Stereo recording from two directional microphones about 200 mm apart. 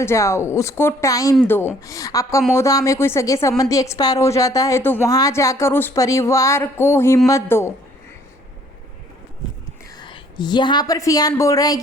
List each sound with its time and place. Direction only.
0.0 s a woman's voice: 15° left (ahead or behind)
10.0 s a woman's voice: 20° left (ahead or behind)